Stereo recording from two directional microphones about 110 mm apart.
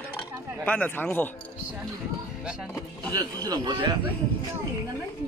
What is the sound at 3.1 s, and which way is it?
Speech, 40° right (ahead or behind).